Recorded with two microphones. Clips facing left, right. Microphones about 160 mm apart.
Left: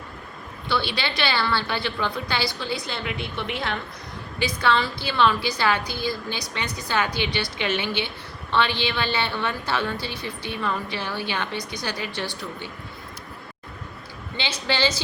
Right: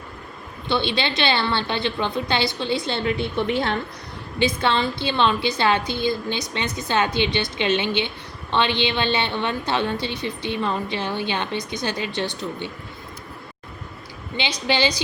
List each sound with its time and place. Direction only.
0.7 s a woman's voice: 20° right (ahead or behind)
4.4 s a woman's voice: 25° right (ahead or behind)
14.3 s a woman's voice: 15° right (ahead or behind)